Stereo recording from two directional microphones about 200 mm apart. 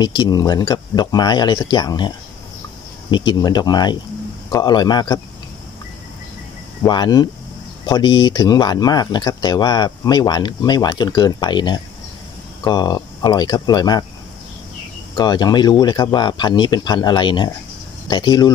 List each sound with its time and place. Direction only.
0.0 s speech: 20° left (ahead or behind)
6.8 s speech: 20° left (ahead or behind)
15.1 s speech: 20° left (ahead or behind)